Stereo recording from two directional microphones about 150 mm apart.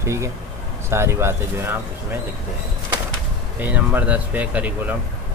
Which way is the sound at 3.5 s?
10° right (ahead or behind).